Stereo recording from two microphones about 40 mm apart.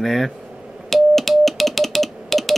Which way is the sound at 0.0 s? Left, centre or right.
Centre.